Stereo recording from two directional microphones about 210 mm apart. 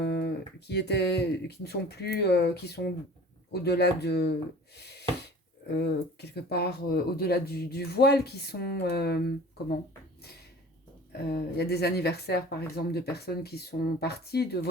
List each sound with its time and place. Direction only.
0.7 s speech: 50° left (ahead or behind)
4.8 s a sound: 50° left (ahead or behind)
5.6 s speech: 50° left (ahead or behind)
11.3 s speech: 50° left (ahead or behind)